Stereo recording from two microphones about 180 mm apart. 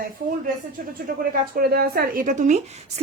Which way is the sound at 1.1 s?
55° right (ahead or behind).